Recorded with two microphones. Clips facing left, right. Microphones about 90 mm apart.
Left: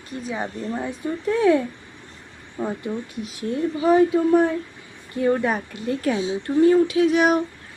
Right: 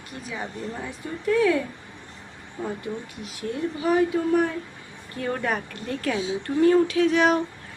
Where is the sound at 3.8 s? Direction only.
25° left (ahead or behind).